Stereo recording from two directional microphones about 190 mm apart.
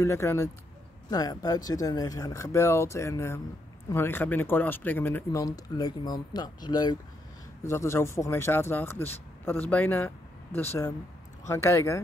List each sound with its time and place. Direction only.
0.0 s speech: 15° left (ahead or behind)